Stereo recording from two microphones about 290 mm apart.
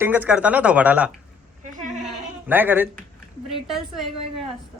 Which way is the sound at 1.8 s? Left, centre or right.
Right.